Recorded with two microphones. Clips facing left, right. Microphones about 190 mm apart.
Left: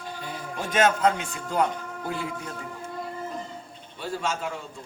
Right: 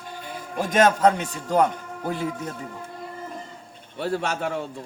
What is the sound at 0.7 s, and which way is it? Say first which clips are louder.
Speech: right 4 dB; 40° right (ahead or behind).